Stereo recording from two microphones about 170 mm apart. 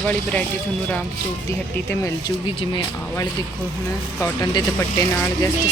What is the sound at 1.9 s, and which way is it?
Speech, 15° left (ahead or behind).